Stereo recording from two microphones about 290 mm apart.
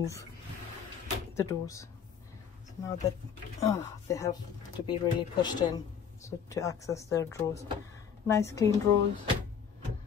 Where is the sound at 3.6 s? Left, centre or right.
Centre.